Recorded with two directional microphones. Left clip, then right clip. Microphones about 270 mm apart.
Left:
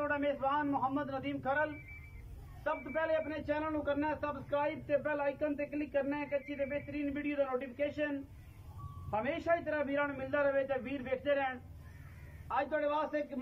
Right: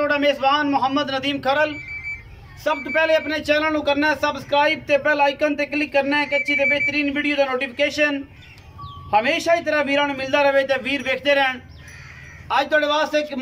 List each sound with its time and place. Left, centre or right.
0.0 s a man's voice: centre
9.1 s speech: centre
12.4 s a man's voice: centre